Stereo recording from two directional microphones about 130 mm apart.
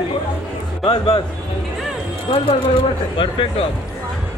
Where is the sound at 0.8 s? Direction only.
40° left (ahead or behind).